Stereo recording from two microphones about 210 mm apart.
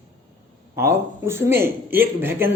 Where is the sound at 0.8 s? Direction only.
10° right (ahead or behind).